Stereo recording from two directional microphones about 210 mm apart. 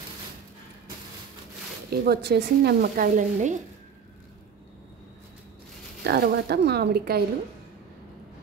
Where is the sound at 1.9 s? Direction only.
50° right (ahead or behind).